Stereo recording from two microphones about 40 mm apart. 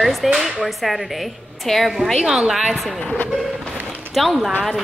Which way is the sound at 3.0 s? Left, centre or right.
Left.